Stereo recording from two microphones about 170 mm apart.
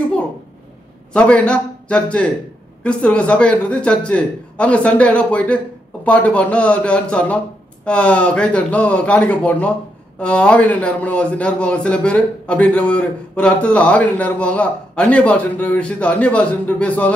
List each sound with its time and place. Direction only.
1.1 s a man's voice: 5° left (ahead or behind)